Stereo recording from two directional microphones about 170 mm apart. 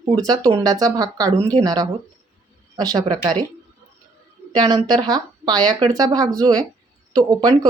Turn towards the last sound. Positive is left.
turn(degrees=-20)  # may be behind; listen again after turning